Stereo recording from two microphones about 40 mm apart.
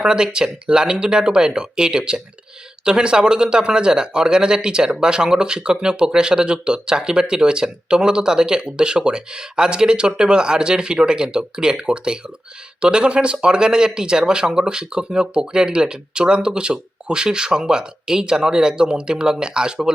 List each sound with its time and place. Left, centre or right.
0.0 s speech: centre